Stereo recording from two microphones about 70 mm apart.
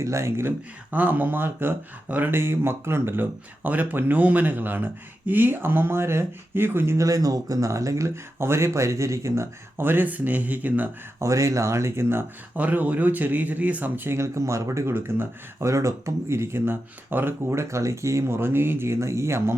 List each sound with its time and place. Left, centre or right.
0.0 s speech: right
0.9 s speech: right
7.0 s speech: right
9.8 s speech: right
11.2 s speech: right
12.5 s speech: right
14.2 s speech: right
14.8 s speech: right
17.5 s speech: right